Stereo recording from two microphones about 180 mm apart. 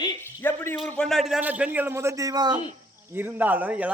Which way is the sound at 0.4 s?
10° left (ahead or behind).